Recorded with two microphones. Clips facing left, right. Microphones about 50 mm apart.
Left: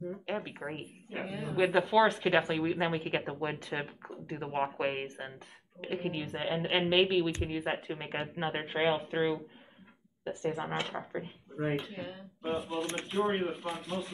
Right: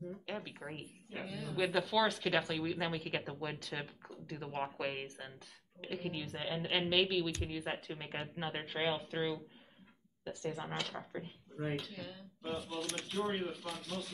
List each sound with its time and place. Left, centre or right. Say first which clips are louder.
0.1 s speech: left 7 dB; left
1.7 s speech: left 6 dB; left
2.0 s speech: left 7 dB; centre
2.2 s speech: left 6 dB; left
7.4 s speech: left 6 dB; centre
7.7 s speech: left 6 dB; left
12.4 s speech: left 7 dB; centre
12.8 s speech: left 6 dB; left